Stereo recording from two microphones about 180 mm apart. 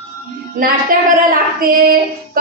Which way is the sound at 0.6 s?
50° right (ahead or behind).